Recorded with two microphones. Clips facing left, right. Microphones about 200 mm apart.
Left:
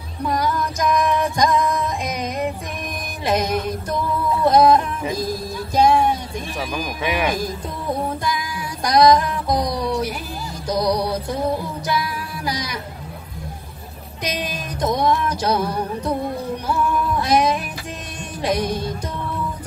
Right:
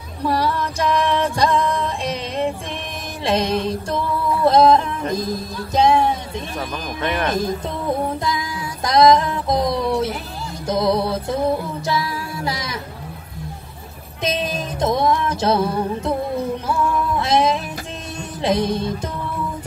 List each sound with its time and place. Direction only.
0.4 s music: 30° right (ahead or behind)
7.0 s speech: 5° left (ahead or behind)
7.3 s music: 25° right (ahead or behind)
8.8 s music: 25° right (ahead or behind)
14.2 s music: 25° right (ahead or behind)
17.2 s music: 25° right (ahead or behind)